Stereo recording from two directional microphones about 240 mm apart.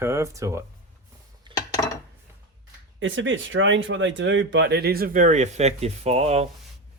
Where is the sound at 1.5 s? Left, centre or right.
Centre.